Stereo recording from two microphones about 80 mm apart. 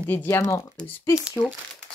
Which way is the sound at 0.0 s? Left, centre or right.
Left.